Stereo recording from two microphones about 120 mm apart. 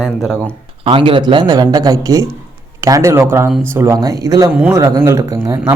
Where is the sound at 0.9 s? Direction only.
45° right (ahead or behind); by 3.9 s 20° right (ahead or behind).